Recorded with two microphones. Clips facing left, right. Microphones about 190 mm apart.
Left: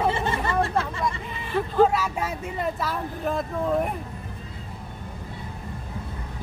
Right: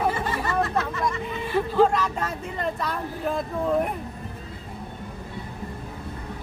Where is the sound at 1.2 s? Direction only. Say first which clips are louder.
Right 2 dB; centre (ahead or behind).